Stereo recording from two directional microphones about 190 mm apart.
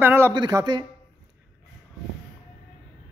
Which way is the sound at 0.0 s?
10° right (ahead or behind).